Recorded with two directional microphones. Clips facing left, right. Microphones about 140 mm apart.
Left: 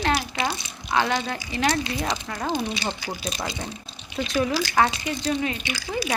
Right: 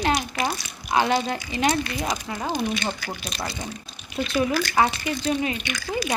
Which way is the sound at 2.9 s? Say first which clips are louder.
Left 1 dB; 20° left (ahead or behind).